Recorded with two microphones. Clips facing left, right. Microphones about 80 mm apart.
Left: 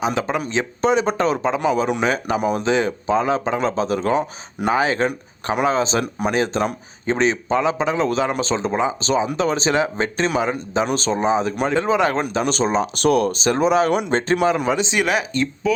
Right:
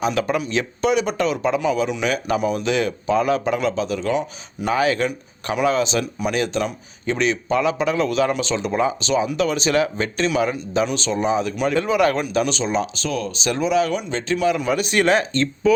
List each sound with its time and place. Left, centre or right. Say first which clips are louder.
0.0 s a man's voice: even; left
4.7 s a man's voice: even; left
5.0 s a man's voice: left 2 dB; left
10.8 s a man's voice: left 2 dB; left
12.5 s speech: left 3 dB; left
13.0 s speech: left 8 dB; left
13.4 s speech: left 3 dB; left
14.8 s a man's voice: right 1 dB; centre
15.0 s speech: right 2 dB; centre